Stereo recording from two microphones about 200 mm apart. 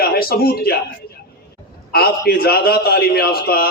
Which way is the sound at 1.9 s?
50° left (ahead or behind).